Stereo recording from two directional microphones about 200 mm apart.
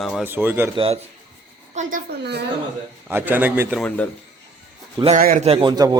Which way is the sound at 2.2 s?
55° right (ahead or behind).